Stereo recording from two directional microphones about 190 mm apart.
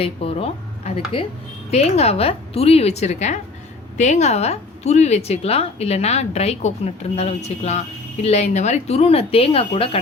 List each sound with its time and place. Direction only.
0.0 s a woman's voice: 30° left (ahead or behind)